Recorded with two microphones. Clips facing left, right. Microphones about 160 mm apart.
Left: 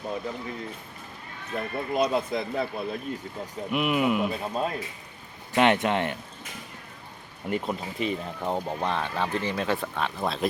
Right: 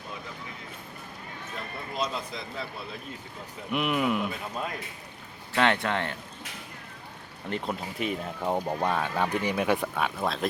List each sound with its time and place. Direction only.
1.5 s speech: 55° left (ahead or behind)
3.7 s speech: centre (ahead or behind)
4.3 s speech: 30° left (ahead or behind)
5.5 s speech: 20° left (ahead or behind)
7.4 s speech: 5° left (ahead or behind)